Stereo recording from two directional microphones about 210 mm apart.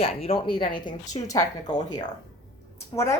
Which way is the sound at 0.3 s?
25° left (ahead or behind).